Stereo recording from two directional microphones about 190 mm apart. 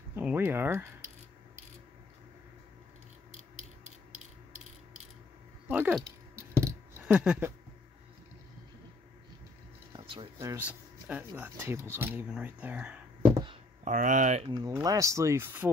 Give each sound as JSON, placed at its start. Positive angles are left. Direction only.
{"t": 0.1, "sound": "speech", "side_deg": -10}
{"t": 5.7, "sound": "a sound", "side_deg": -5}
{"t": 9.9, "sound": "a sound", "side_deg": -30}
{"t": 10.4, "sound": "speech", "side_deg": -10}
{"t": 13.8, "sound": "speech", "side_deg": -40}
{"t": 14.5, "sound": "speech", "side_deg": -20}